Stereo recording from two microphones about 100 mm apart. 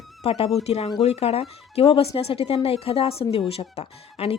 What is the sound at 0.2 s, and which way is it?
Speech, 75° left (ahead or behind).